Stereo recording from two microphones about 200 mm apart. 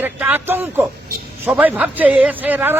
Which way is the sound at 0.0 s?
10° right (ahead or behind).